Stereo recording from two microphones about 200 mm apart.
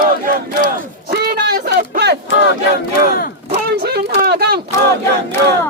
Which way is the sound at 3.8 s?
50° right (ahead or behind).